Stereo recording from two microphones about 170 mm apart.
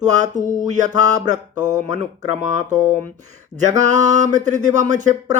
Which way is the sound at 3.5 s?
45° right (ahead or behind).